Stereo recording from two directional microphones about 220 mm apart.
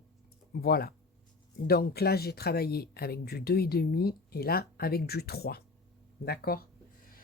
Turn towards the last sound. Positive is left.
turn(degrees=45)  # may be behind; listen again after turning